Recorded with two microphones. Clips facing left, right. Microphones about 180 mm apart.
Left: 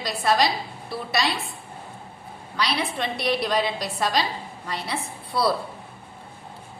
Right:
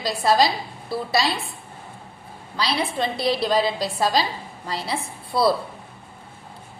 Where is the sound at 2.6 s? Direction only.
30° right (ahead or behind).